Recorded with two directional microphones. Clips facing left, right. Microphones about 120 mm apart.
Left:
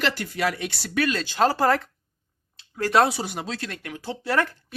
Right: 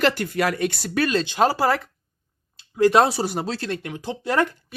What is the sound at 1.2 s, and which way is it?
Speech, 15° right (ahead or behind).